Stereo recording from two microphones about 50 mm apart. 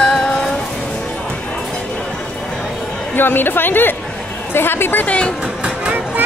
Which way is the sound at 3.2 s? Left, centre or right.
Left.